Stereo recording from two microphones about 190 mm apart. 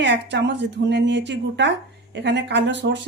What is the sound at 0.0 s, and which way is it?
A woman's voice, 65° right (ahead or behind).